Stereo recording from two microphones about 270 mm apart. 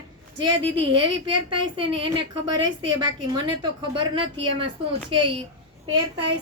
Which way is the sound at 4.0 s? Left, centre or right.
Centre.